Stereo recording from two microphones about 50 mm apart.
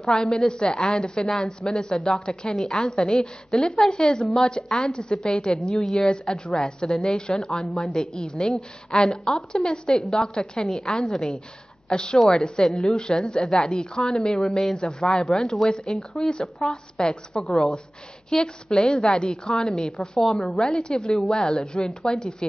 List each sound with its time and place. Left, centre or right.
0.0 s a woman's voice: centre
12.9 s a woman's voice: centre
14.8 s a woman's voice: centre
17.4 s a woman's voice: centre
21.4 s a woman's voice: centre